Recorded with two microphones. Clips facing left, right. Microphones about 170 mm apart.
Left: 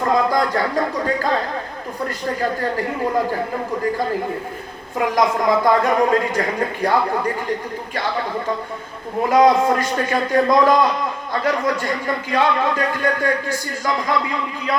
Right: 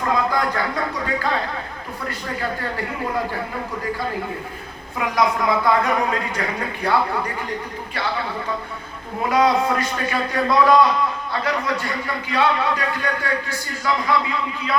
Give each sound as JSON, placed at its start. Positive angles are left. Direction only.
{"t": 0.0, "sound": "speech", "side_deg": 40}
{"t": 4.9, "sound": "a man's voice", "side_deg": 45}